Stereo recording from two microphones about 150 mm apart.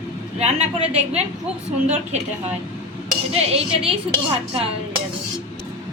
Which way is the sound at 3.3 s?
40° right (ahead or behind).